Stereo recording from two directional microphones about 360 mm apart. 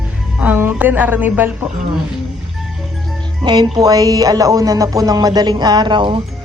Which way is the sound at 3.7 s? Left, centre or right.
Centre.